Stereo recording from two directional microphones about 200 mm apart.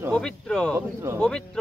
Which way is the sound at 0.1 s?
5° left (ahead or behind).